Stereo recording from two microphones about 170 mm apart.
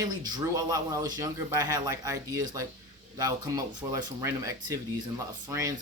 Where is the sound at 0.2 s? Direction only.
25° right (ahead or behind).